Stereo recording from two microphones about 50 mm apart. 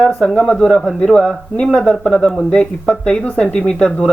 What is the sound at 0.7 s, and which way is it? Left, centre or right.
Speech, centre.